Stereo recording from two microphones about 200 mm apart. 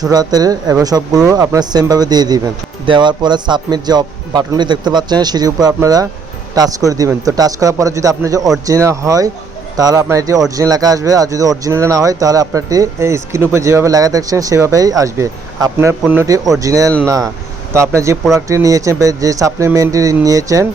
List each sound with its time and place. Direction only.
0.1 s speech: 20° right (ahead or behind)